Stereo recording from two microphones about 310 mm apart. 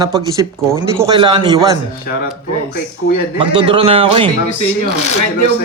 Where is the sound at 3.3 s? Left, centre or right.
Centre.